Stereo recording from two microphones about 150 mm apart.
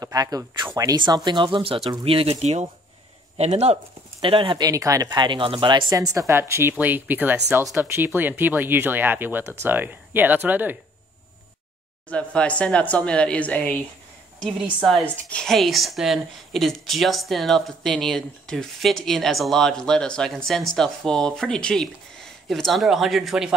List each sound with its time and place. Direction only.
0.0 s speech: 25° right (ahead or behind)
12.1 s speech: 5° left (ahead or behind)
14.4 s a woman's voice: centre (ahead or behind)